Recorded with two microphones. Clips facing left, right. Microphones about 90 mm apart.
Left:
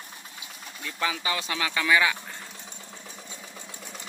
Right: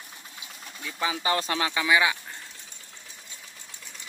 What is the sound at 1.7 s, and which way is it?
Speech, 15° right (ahead or behind).